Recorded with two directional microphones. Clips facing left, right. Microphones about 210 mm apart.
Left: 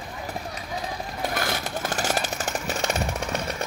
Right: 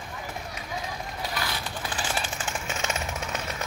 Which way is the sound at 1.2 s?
45° left (ahead or behind).